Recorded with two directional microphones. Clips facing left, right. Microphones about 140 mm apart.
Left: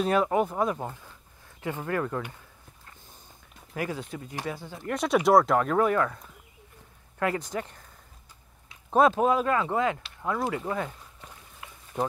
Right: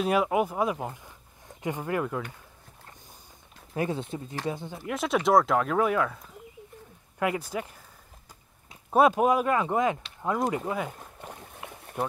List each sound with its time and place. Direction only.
0.0 s speech: 5° right (ahead or behind)
3.7 s speech: 25° right (ahead or behind)
4.7 s speech: centre (ahead or behind)
8.9 s speech: 10° right (ahead or behind)
10.9 s a sound: 55° right (ahead or behind)
11.9 s speech: 5° right (ahead or behind)